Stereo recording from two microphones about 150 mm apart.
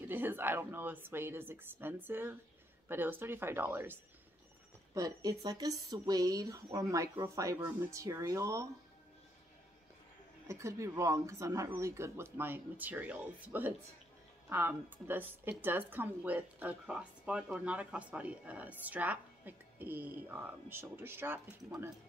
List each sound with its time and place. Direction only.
0.0 s a woman's voice: 15° right (ahead or behind)
10.5 s a woman's voice: 20° right (ahead or behind)